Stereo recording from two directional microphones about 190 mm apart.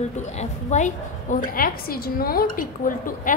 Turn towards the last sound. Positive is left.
turn(degrees=45)  # may be behind; listen again after turning